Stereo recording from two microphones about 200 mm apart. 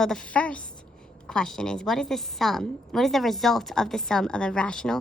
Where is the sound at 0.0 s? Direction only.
5° left (ahead or behind).